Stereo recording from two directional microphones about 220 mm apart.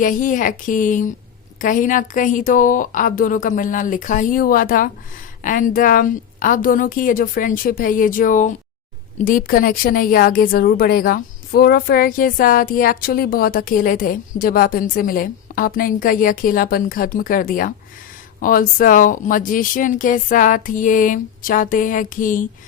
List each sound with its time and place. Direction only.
0.0 s a woman's voice: 35° left (ahead or behind)